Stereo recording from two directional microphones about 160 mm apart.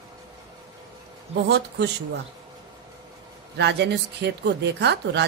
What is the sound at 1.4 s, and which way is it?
Speech, 90° right.